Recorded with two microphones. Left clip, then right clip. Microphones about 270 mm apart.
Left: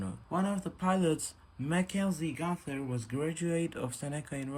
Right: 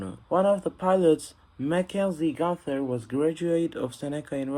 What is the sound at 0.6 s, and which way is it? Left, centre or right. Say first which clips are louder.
Speech: right 9 dB; centre.